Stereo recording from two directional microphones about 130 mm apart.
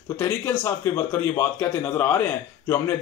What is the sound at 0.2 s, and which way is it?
A man's voice, 20° left (ahead or behind).